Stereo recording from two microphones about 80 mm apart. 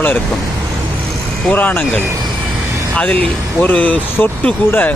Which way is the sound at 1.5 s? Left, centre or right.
Left.